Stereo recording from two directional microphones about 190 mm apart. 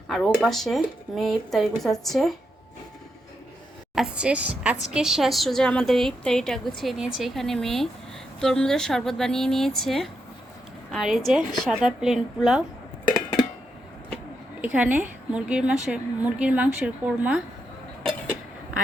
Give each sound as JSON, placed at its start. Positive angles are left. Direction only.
{"t": 0.1, "sound": "a woman's voice", "side_deg": 5}
{"t": 3.9, "sound": "a woman's voice", "side_deg": -5}
{"t": 13.1, "sound": "a sound", "side_deg": 15}
{"t": 14.6, "sound": "a woman's voice", "side_deg": -10}